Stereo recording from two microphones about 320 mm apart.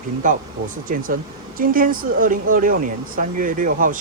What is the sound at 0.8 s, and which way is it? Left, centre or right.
Speech, right.